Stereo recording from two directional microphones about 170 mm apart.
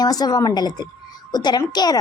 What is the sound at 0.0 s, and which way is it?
A woman's voice, 25° left (ahead or behind).